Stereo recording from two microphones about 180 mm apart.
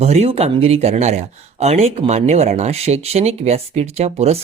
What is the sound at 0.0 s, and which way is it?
Speech, 35° right (ahead or behind).